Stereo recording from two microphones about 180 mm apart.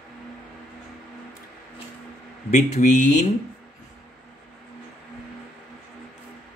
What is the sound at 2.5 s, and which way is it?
Speech, 40° left (ahead or behind).